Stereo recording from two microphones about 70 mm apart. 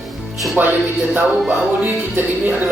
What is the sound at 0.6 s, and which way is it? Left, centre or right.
Speech, right.